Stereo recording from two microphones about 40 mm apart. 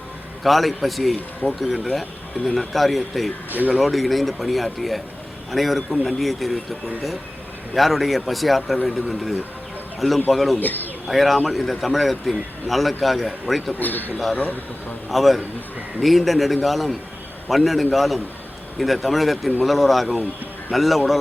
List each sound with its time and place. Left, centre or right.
0.4 s a man's voice: centre
10.6 s a man's voice: left
11.1 s a man's voice: centre
13.7 s a man's voice: left
15.1 s a man's voice: centre